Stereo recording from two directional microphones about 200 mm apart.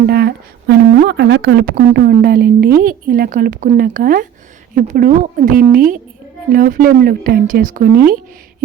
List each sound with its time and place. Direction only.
0.1 s speech: 50° right (ahead or behind)